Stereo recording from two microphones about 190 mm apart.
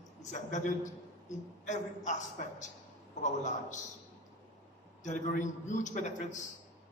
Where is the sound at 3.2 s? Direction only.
40° left (ahead or behind).